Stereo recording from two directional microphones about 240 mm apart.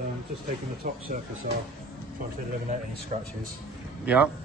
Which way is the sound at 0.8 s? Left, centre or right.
Right.